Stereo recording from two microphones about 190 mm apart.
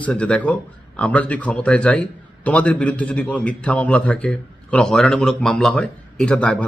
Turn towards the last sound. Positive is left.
turn(degrees=5)  # may be behind; listen again after turning